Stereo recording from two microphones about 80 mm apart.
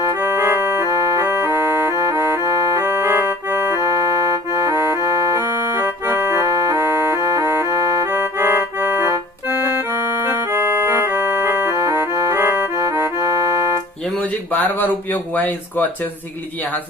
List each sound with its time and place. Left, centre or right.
0.0 s music: right
14.2 s speech: left